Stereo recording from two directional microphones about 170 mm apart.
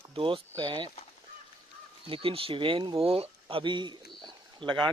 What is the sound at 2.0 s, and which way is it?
Speech, 35° right (ahead or behind).